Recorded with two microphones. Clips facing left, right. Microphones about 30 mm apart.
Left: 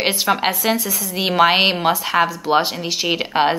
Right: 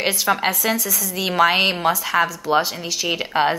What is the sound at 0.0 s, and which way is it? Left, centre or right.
Speech, left.